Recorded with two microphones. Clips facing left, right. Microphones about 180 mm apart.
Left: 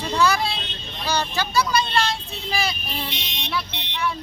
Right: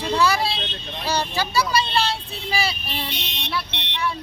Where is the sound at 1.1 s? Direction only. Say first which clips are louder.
Even; 10° right (ahead or behind).